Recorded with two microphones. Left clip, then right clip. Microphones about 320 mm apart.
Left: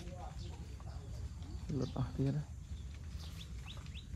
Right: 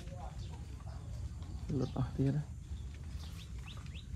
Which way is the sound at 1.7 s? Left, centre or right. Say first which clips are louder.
Right 3 dB; centre.